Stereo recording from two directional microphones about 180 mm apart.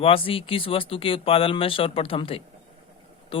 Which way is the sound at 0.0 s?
30° left (ahead or behind).